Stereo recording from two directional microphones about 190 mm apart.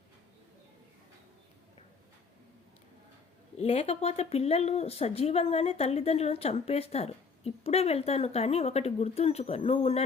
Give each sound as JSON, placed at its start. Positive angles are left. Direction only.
{"t": 3.6, "sound": "speech", "side_deg": 30}